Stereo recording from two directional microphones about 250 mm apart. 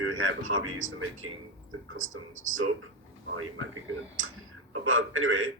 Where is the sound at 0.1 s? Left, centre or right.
Right.